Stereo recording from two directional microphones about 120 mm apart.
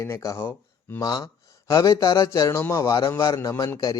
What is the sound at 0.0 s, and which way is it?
A man's voice, 25° left (ahead or behind).